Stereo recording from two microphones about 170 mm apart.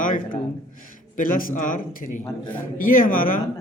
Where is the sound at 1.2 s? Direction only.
55° left (ahead or behind).